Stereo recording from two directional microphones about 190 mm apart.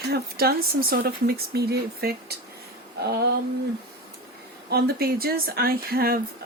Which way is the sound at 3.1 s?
60° right (ahead or behind).